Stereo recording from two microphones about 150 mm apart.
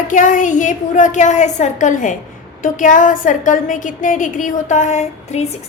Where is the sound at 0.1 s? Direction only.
60° left (ahead or behind).